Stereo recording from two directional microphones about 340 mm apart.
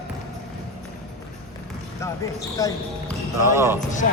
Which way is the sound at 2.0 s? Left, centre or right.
Centre.